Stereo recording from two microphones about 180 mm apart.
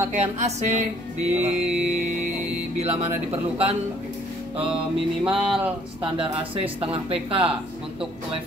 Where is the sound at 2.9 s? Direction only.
35° right (ahead or behind).